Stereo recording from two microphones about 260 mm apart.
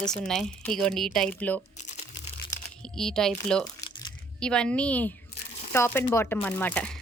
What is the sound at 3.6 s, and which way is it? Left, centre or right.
Crumpling, centre.